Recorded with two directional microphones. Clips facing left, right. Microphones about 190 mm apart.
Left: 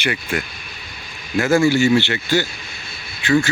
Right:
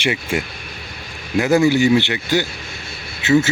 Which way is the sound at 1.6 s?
15° right (ahead or behind).